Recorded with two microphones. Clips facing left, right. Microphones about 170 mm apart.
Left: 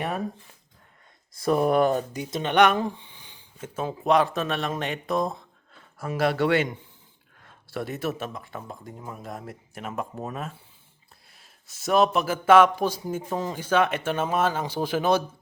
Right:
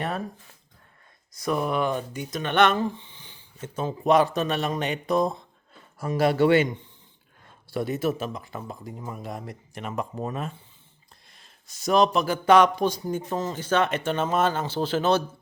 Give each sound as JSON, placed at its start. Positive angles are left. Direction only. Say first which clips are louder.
{"t": 1.3, "sound": "speech", "louder": "left 4 dB", "side_deg": 30}
{"t": 2.3, "sound": "a man's voice", "louder": "left 1 dB", "side_deg": 15}